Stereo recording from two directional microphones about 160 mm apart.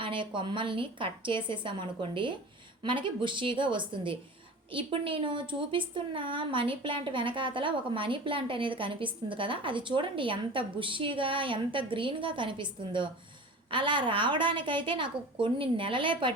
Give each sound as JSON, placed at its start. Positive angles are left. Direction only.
{"t": 0.0, "sound": "a woman's voice", "side_deg": -30}